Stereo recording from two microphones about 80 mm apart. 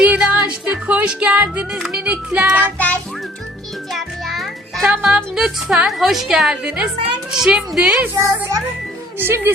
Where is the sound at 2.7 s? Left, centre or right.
Centre.